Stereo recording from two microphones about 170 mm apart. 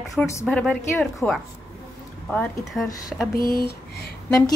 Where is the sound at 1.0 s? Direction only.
5° left (ahead or behind).